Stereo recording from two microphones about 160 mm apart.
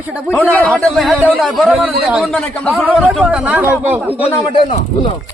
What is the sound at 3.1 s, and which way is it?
Speech, 5° right (ahead or behind).